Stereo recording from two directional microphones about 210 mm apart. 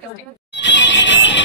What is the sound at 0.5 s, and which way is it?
Music, 60° left (ahead or behind).